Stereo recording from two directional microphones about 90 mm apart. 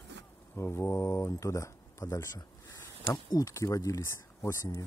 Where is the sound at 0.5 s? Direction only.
30° left (ahead or behind).